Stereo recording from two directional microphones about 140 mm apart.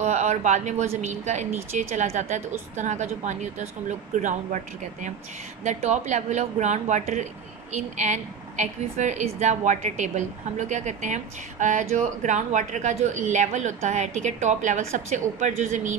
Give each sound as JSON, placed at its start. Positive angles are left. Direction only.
{"t": 0.0, "sound": "a woman's voice", "side_deg": -60}
{"t": 5.6, "sound": "a woman's voice", "side_deg": -60}